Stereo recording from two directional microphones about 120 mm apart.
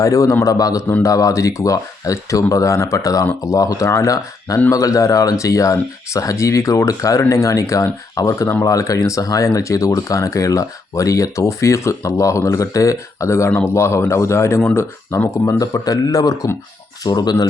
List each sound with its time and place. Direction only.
0.0 s speech: 30° left (ahead or behind)